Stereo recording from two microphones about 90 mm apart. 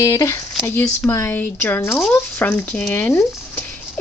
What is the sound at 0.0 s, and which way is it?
Speech, 35° left (ahead or behind).